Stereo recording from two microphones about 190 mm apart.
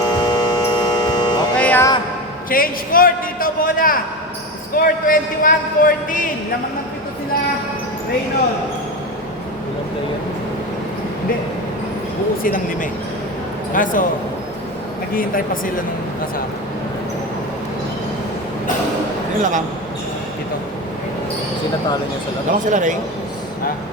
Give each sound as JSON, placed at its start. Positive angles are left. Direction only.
{"t": 0.2, "sound": "mains hum", "side_deg": 20}
{"t": 1.5, "sound": "music", "side_deg": 10}
{"t": 2.5, "sound": "a man's voice", "side_deg": 50}
{"t": 12.4, "sound": "a man's voice", "side_deg": 45}
{"t": 15.1, "sound": "a man's voice", "side_deg": 50}
{"t": 19.4, "sound": "speech", "side_deg": -40}
{"t": 22.6, "sound": "a man's voice", "side_deg": -40}